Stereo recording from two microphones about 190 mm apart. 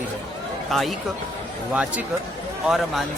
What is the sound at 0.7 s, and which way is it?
Speech, centre (ahead or behind).